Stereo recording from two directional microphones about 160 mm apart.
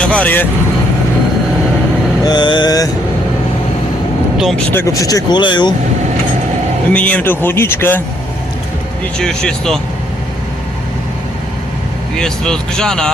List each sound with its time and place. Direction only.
0.0 s speech: 10° left (ahead or behind)
2.2 s speech: 30° left (ahead or behind)
4.4 s speech: centre (ahead or behind)
4.7 s speech: 15° left (ahead or behind)
6.9 s speech: 10° left (ahead or behind)
9.1 s speech: 5° left (ahead or behind)
12.1 s speech: 5° left (ahead or behind)